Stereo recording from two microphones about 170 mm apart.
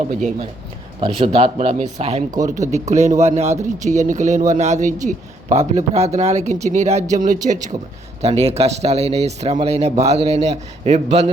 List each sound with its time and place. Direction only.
0.1 s a man's voice: 45° right (ahead or behind)